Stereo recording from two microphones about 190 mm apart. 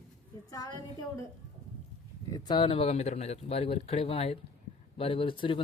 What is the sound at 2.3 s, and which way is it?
A man's voice, 25° left (ahead or behind).